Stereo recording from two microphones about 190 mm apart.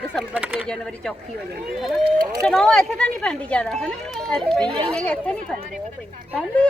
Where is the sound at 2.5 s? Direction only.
Centre (ahead or behind).